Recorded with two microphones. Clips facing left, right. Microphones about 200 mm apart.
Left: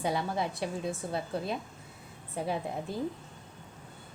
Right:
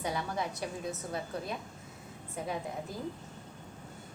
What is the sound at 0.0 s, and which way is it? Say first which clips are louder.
A woman's voice: left 3 dB; 30° left (ahead or behind).